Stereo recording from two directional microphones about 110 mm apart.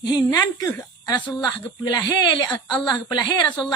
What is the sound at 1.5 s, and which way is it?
Speech, 40° left (ahead or behind).